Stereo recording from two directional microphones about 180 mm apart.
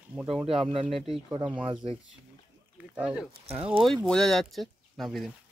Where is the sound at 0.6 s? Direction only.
30° right (ahead or behind).